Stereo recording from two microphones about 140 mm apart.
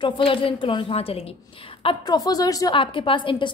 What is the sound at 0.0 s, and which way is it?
A woman's voice, 40° left (ahead or behind).